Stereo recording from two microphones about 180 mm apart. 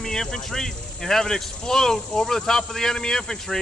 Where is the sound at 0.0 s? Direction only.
5° left (ahead or behind).